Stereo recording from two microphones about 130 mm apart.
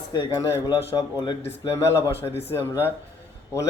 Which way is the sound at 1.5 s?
20° left (ahead or behind).